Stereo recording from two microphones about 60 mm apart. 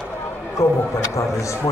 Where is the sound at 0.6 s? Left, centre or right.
Left.